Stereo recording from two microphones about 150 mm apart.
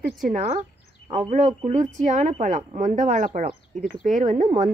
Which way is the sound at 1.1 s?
50° right (ahead or behind).